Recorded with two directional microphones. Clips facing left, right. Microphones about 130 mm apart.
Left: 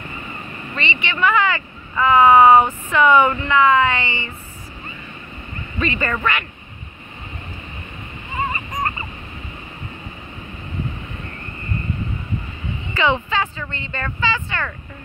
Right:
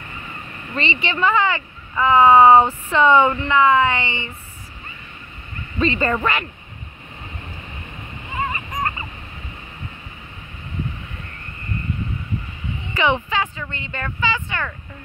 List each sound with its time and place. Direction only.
0.7 s speech: 35° right (ahead or behind); by 4.3 s 20° right (ahead or behind)
5.8 s speech: 30° right (ahead or behind)
8.4 s a sound: 5° left (ahead or behind)
12.9 s speech: 20° right (ahead or behind)